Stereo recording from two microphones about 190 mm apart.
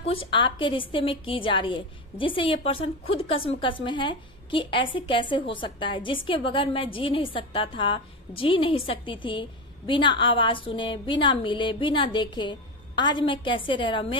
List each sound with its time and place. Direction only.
0.0 s a woman's voice: 30° left (ahead or behind)